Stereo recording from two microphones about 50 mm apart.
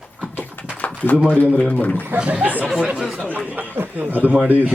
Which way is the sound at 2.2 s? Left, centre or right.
Right.